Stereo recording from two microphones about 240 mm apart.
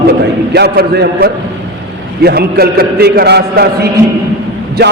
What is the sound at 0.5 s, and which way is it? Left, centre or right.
A man's voice, right.